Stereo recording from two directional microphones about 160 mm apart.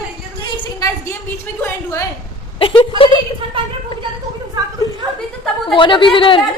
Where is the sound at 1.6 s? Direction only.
20° left (ahead or behind).